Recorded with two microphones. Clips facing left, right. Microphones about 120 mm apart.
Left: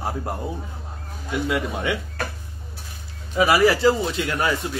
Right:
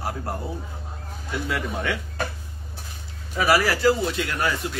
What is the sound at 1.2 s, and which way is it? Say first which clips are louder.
Speech: left 4 dB; 15° left (ahead or behind).